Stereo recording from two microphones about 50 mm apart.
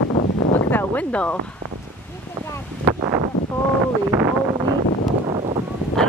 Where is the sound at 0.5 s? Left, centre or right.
Left.